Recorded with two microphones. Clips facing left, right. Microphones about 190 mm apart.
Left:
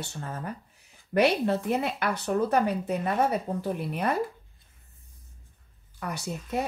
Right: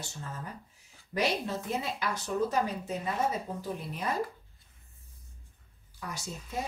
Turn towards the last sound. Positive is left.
turn(degrees=65)  # may be behind; listen again after turning